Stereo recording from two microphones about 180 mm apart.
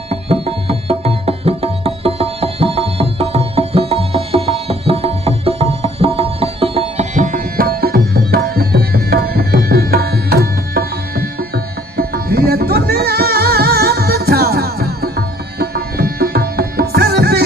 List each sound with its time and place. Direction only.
0.1 s music: 35° right (ahead or behind); by 17.4 s 60° right (ahead or behind)